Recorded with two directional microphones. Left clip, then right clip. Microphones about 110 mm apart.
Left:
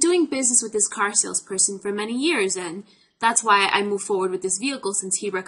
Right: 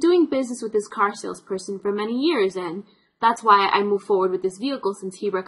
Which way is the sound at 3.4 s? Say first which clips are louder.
Right 2 dB; 45° left (ahead or behind).